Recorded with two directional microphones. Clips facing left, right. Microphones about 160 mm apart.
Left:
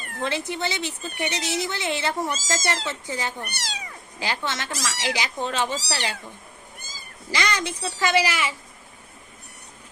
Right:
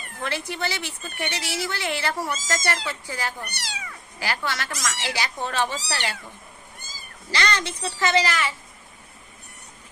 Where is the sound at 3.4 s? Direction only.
45° left (ahead or behind).